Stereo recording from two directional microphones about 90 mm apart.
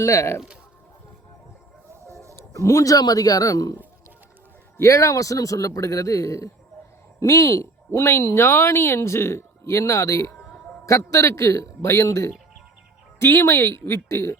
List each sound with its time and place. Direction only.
0.0 s speech: 35° left (ahead or behind)
2.5 s speech: 35° left (ahead or behind)
4.8 s speech: 35° left (ahead or behind)
13.1 s speech: 25° left (ahead or behind)